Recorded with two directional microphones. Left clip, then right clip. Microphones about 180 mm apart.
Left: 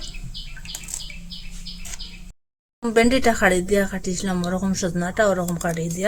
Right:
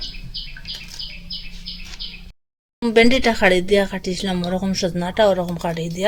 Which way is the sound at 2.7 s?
10° right (ahead or behind).